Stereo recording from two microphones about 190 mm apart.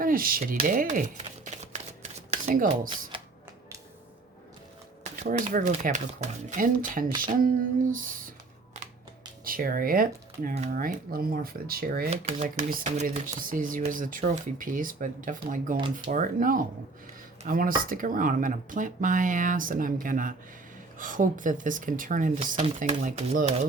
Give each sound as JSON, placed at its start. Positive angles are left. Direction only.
{"t": 0.0, "sound": "speech", "side_deg": -50}
{"t": 5.2, "sound": "speech", "side_deg": -40}
{"t": 9.4, "sound": "speech", "side_deg": -50}
{"t": 12.1, "sound": "speech", "side_deg": -40}